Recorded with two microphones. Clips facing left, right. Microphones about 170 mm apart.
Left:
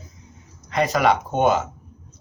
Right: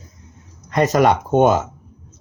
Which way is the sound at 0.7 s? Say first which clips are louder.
Right 4 dB; 45° right (ahead or behind).